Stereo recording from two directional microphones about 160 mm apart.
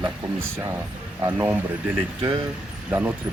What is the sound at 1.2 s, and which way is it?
Speech, 15° right (ahead or behind).